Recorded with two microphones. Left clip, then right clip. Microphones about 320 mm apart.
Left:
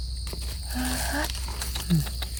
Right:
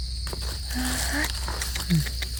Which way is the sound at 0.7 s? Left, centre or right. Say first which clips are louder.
Right 1 dB; centre.